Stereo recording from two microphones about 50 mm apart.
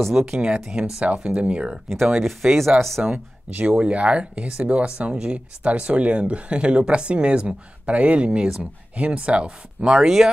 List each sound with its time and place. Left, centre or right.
0.1 s speech: centre
2.2 s speech: centre
3.0 s speech: right
9.9 s speech: centre